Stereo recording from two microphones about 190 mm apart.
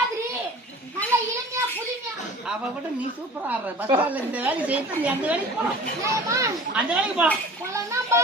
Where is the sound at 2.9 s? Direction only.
10° right (ahead or behind).